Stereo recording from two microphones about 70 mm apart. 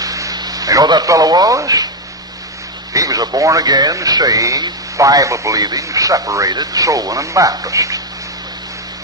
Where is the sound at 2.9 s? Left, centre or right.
Right.